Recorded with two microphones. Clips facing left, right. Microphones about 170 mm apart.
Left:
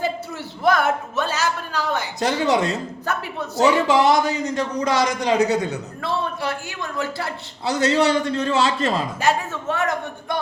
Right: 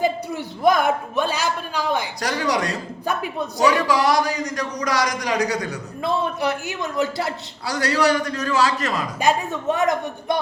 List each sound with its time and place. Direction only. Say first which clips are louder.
0.0 s a sound: right 3 dB; 15° right (ahead or behind)
2.2 s a man's voice: left 5 dB; 25° left (ahead or behind)
3.1 s a man's voice: right 2 dB; 15° right (ahead or behind)
3.6 s a man's voice: left 2 dB; 25° left (ahead or behind)
6.0 s a man's voice: right 4 dB; 15° right (ahead or behind)
7.6 s a man's voice: left 2 dB; 25° left (ahead or behind)
9.2 s a man's voice: right 3 dB; 15° right (ahead or behind)